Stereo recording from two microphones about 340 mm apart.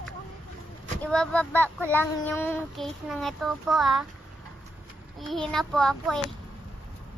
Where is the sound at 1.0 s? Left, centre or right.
Centre.